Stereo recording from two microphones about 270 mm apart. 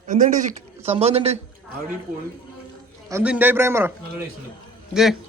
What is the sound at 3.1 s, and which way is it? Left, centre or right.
Speech, centre.